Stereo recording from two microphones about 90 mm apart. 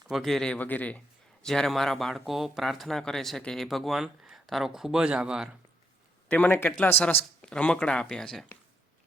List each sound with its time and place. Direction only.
0.1 s speech: centre (ahead or behind); by 1.0 s 15° left (ahead or behind)
1.5 s speech: 5° left (ahead or behind)
6.2 s speech: 20° left (ahead or behind)